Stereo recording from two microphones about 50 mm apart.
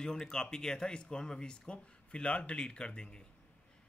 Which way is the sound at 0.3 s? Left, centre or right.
Centre.